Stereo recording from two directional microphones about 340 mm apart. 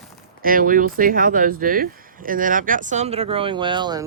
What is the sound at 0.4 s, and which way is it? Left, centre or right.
Speech, right.